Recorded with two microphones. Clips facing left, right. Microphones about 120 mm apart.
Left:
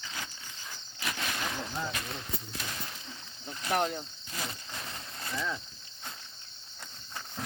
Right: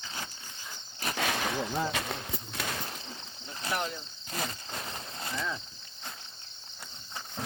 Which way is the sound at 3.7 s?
55° left (ahead or behind).